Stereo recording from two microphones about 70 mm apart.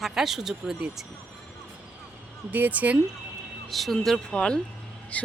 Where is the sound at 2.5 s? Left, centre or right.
Right.